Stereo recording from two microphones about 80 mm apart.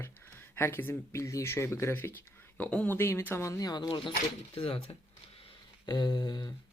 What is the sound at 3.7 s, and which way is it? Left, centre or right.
Speech, left.